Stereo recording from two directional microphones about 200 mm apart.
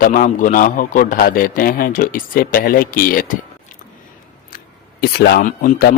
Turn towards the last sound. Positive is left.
turn(degrees=40)  # may be behind; listen again after turning